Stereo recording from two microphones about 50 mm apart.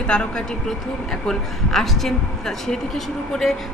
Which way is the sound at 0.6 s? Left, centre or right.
Centre.